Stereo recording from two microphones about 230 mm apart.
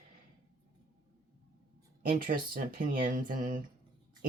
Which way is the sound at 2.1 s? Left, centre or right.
Right.